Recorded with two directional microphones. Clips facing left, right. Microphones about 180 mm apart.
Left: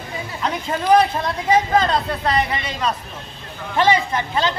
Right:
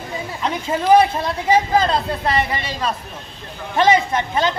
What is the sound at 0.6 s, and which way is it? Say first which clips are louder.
Speech: right 2 dB; 5° right (ahead or behind).